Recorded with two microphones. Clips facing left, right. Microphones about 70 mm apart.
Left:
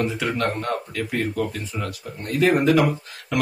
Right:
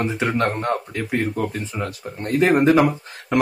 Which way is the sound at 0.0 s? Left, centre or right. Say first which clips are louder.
Right 2 dB; right.